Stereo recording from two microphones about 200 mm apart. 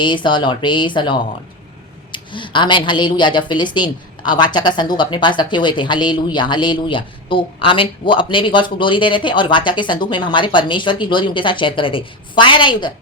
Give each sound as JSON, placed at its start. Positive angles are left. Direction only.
{"t": 0.0, "sound": "speech", "side_deg": 25}